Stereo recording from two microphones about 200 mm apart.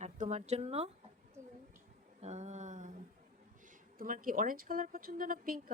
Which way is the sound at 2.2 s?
35° right (ahead or behind).